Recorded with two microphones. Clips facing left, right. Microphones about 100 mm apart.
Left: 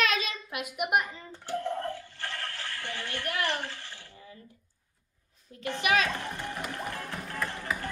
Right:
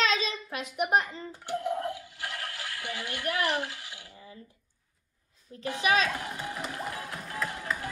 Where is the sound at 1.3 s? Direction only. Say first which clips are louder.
Right 2 dB; 10° right (ahead or behind).